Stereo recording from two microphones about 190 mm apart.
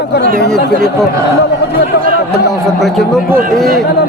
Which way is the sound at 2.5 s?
Centre (ahead or behind).